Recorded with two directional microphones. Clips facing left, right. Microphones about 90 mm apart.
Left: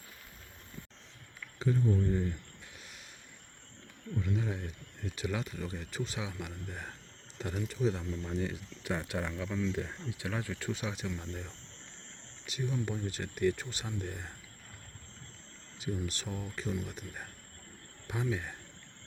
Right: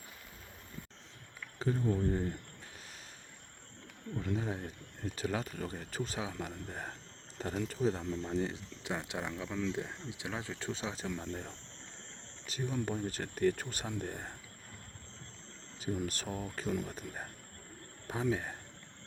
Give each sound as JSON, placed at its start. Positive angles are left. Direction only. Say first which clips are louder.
{"t": 1.5, "sound": "a sound", "louder": "left 2 dB", "side_deg": -30}
{"t": 2.0, "sound": "speech", "louder": "left 1 dB", "side_deg": -25}
{"t": 4.2, "sound": "speech", "louder": "left 1 dB", "side_deg": -35}
{"t": 9.3, "sound": "speech", "louder": "left 2 dB", "side_deg": -35}
{"t": 10.1, "sound": "speech", "louder": "left 3 dB", "side_deg": -20}
{"t": 16.0, "sound": "speech", "louder": "right 1 dB", "side_deg": -45}